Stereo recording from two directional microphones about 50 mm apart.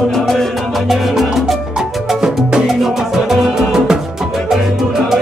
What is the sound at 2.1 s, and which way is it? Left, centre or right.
Music, centre.